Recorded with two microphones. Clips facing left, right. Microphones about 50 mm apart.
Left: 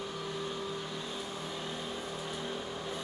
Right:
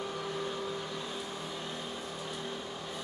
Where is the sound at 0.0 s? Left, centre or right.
Centre.